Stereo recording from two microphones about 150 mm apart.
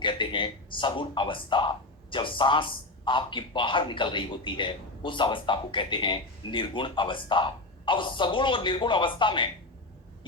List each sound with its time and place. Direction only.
0.0 s speech: 35° left (ahead or behind)